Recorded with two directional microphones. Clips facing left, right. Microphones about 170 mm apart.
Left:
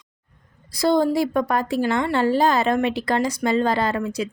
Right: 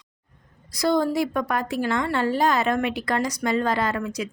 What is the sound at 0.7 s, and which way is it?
A woman's voice, 30° left (ahead or behind).